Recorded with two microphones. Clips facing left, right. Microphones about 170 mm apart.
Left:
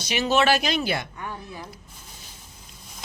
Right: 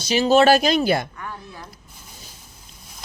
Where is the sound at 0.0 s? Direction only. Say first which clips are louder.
Right 6 dB; 30° right (ahead or behind).